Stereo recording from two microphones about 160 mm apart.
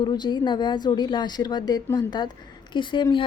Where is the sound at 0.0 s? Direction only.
25° left (ahead or behind).